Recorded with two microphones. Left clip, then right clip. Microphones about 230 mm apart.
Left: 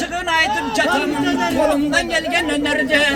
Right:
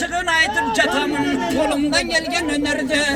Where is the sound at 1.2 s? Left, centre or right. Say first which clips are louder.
Left 2 dB; left.